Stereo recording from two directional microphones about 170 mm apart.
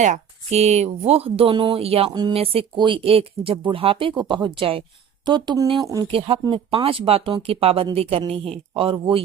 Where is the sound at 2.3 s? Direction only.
35° right (ahead or behind).